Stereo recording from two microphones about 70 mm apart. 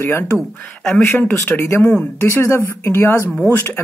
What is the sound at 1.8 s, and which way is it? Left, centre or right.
Speech, centre.